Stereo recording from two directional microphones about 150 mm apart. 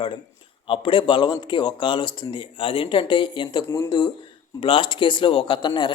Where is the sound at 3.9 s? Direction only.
30° left (ahead or behind).